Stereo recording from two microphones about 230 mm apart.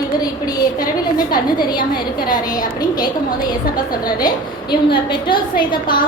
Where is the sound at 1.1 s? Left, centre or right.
Centre.